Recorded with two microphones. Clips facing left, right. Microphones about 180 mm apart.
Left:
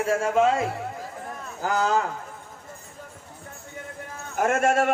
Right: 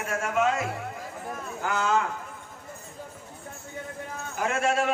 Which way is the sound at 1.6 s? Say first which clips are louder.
Left 3 dB; 35° left (ahead or behind).